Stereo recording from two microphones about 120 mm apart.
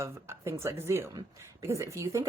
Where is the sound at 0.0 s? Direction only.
20° right (ahead or behind).